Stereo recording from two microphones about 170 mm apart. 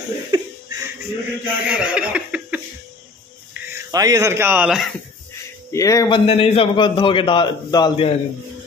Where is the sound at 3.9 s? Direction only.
20° right (ahead or behind).